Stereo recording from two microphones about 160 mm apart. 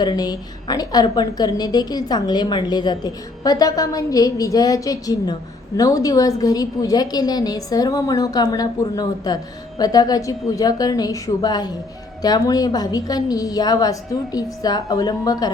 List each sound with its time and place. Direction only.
0.0 s a woman's voice: 25° left (ahead or behind)